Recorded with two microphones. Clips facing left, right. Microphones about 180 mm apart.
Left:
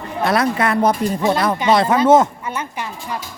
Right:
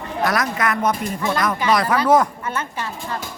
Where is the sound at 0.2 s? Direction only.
30° left (ahead or behind).